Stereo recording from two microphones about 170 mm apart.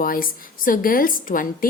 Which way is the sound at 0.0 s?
55° left (ahead or behind).